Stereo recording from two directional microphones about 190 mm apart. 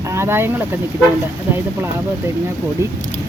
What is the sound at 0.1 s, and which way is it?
Speech, 10° right (ahead or behind).